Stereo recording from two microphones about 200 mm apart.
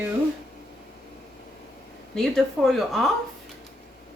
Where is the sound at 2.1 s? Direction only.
Centre (ahead or behind).